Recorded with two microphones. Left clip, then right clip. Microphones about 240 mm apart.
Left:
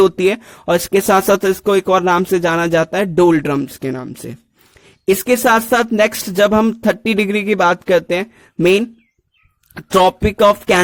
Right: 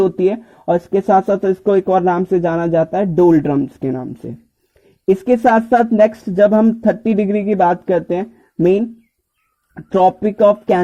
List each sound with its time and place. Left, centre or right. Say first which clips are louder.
0.0 s speech: left 2 dB; left